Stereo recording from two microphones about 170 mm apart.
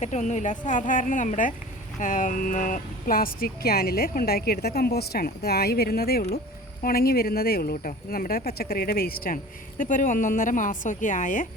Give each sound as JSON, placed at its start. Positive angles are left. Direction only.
{"t": 0.0, "sound": "speech", "side_deg": 45}